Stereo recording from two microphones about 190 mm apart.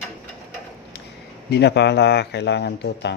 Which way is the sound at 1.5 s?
65° left (ahead or behind).